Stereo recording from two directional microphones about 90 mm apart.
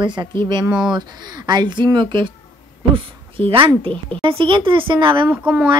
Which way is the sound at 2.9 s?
80° right.